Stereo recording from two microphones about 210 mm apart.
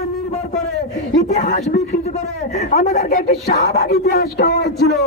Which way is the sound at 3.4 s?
50° left (ahead or behind).